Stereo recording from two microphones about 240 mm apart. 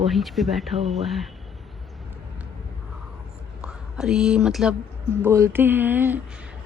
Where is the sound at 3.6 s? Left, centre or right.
Centre.